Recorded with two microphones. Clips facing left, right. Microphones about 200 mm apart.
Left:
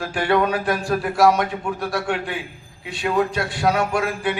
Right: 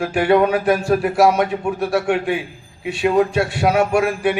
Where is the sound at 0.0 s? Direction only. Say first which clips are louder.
Right 5 dB; 20° right (ahead or behind).